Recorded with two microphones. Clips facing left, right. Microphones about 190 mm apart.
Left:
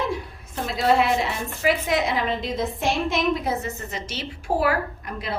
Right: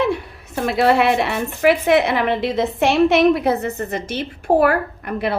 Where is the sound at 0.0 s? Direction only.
70° right (ahead or behind).